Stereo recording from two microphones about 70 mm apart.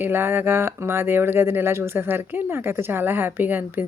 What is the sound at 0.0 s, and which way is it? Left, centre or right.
Speech, right.